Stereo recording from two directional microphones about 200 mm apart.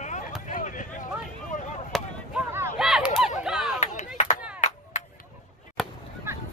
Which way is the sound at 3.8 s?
35° left (ahead or behind).